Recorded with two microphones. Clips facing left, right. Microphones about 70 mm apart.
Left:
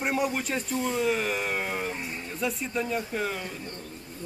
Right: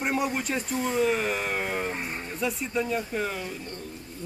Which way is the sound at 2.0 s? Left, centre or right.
Right.